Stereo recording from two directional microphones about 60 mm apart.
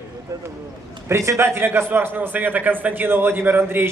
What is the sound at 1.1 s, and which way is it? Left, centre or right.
Speech, right.